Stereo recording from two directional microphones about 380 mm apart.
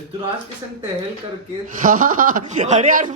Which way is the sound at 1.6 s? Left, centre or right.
Right.